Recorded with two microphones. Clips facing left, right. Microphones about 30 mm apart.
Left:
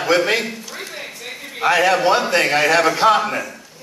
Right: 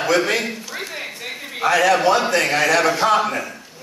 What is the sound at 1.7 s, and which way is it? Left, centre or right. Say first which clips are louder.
A man's voice: even; centre.